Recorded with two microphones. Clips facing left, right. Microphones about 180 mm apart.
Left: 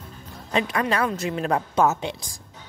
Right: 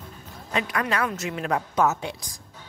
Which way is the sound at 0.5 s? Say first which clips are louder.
Left 3 dB; 25° left (ahead or behind).